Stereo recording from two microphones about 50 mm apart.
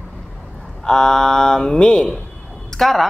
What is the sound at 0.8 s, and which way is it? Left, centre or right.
Speech, centre.